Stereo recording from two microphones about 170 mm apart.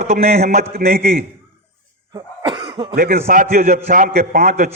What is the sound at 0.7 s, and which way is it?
Speech, 60° right (ahead or behind).